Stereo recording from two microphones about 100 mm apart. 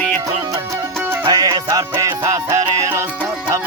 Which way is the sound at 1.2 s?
40° right (ahead or behind).